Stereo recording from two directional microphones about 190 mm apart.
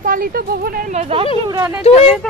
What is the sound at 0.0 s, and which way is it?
Speech, 45° right (ahead or behind).